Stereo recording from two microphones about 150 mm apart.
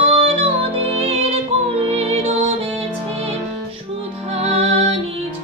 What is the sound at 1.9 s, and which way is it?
Music, 40° right (ahead or behind).